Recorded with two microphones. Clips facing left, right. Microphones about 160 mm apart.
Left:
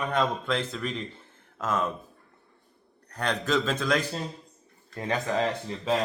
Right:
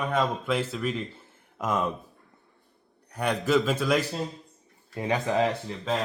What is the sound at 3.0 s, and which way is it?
Speech, 10° right (ahead or behind).